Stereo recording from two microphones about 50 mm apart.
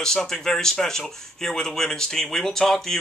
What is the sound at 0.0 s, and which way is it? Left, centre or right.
Speech, centre.